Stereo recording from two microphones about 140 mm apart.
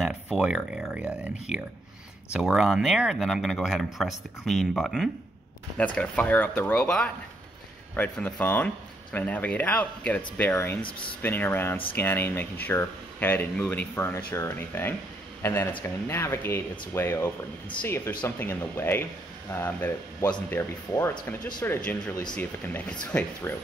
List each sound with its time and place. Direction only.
0.0 s speech: 5° right (ahead or behind); by 23.6 s 15° left (ahead or behind)